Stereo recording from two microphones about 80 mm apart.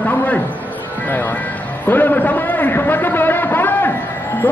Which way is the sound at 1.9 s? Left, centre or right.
Left.